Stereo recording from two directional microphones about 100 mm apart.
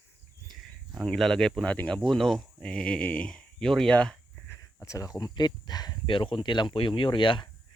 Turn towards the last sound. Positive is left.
turn(degrees=55)  # may be behind; listen again after turning